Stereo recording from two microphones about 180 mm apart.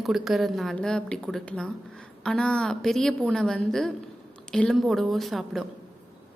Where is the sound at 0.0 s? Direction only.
Centre (ahead or behind).